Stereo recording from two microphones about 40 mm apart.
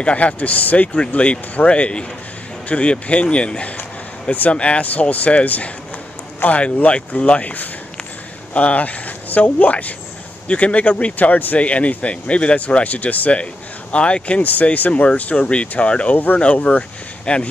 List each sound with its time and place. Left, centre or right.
0.0 s speech: left
10.5 s speech: left
11.1 s speech: left
11.5 s speech: left
13.9 s speech: left
14.4 s speech: left
16.7 s speech: left
17.3 s speech: left